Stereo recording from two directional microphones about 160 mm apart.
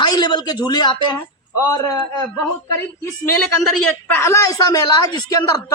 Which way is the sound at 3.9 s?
15° left (ahead or behind).